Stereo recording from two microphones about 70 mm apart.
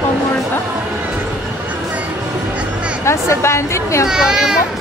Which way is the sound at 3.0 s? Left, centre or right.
Left.